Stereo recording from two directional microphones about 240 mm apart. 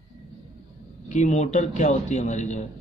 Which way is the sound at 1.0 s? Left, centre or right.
Left.